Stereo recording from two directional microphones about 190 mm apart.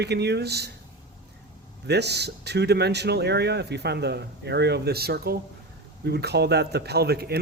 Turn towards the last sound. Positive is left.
turn(degrees=-55)  # may be behind; listen again after turning